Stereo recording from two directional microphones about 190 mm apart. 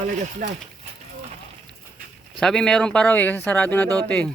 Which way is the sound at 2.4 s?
5° left (ahead or behind).